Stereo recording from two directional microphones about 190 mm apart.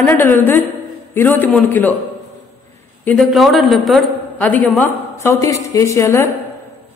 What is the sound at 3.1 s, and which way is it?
A woman's voice, centre (ahead or behind).